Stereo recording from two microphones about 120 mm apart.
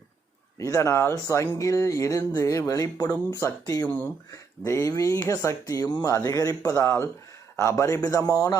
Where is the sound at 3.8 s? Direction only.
10° left (ahead or behind).